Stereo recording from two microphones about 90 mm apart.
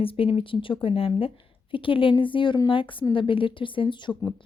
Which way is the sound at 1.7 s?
75° left (ahead or behind).